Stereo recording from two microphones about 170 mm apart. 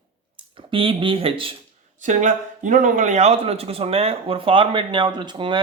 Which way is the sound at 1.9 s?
50° right (ahead or behind).